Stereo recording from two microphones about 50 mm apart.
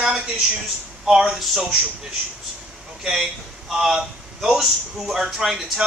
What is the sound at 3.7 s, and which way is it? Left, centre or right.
Speech, centre.